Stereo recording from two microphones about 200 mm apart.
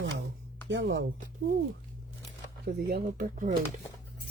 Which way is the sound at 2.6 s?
50° right (ahead or behind).